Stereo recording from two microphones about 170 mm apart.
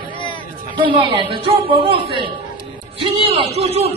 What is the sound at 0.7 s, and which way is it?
Speech, 30° right (ahead or behind).